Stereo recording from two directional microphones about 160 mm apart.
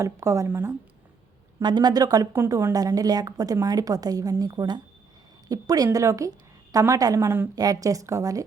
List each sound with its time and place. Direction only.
0.0 s speech: 20° right (ahead or behind)
1.5 s a woman's voice: 25° right (ahead or behind)